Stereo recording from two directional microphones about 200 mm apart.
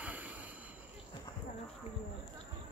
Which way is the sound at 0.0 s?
5° right (ahead or behind).